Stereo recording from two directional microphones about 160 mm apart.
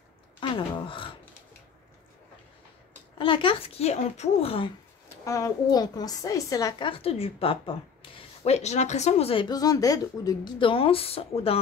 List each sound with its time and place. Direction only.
0.4 s a sound: 30° left (ahead or behind)
3.2 s a woman's voice: 30° left (ahead or behind)
5.1 s a woman's voice: 20° left (ahead or behind); by 11.5 s 40° left (ahead or behind)